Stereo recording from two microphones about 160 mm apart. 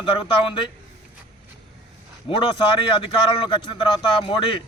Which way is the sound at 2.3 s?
30° left (ahead or behind).